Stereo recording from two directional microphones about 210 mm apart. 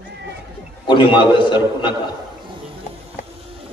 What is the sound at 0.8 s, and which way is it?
A man's voice, 25° left (ahead or behind).